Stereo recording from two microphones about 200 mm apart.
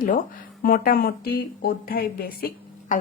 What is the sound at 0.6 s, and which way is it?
Speech, 50° left (ahead or behind).